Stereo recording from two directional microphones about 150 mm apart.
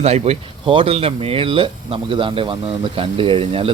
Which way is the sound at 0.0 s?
45° right (ahead or behind).